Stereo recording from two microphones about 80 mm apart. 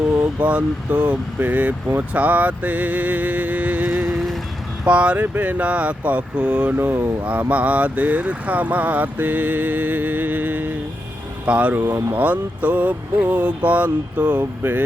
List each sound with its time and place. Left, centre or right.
0.3 s speech: centre